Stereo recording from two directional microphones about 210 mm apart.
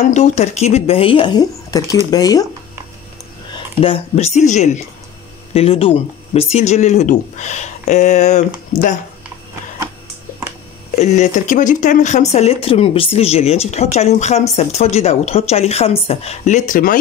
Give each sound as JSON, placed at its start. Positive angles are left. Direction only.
{"t": 0.1, "sound": "speech", "side_deg": 30}
{"t": 3.5, "sound": "speech", "side_deg": 25}
{"t": 11.0, "sound": "speech", "side_deg": 35}